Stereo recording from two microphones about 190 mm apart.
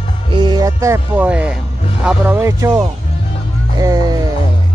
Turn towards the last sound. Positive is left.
turn(degrees=-20)  # may be behind; listen again after turning